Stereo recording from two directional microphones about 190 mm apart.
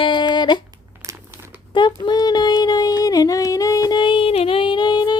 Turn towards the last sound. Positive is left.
turn(degrees=20)  # may be behind; listen again after turning